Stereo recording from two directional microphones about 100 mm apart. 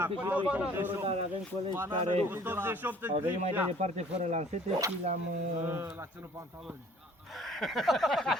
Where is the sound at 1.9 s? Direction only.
70° right (ahead or behind).